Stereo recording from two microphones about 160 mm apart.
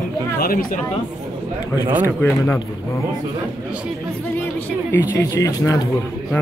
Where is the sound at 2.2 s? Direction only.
15° left (ahead or behind).